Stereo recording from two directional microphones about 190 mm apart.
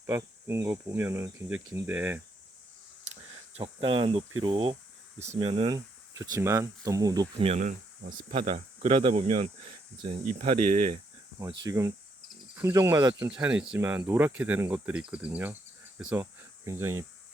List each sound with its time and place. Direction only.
0.0 s speech: 15° right (ahead or behind)
3.6 s speech: 25° right (ahead or behind); by 8.1 s 40° right (ahead or behind)
8.3 s speech: 30° right (ahead or behind)
11.6 s speech: 20° right (ahead or behind)
13.2 s speech: 10° right (ahead or behind)